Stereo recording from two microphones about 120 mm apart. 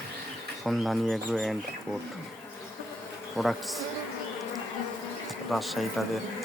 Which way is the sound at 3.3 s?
Centre (ahead or behind).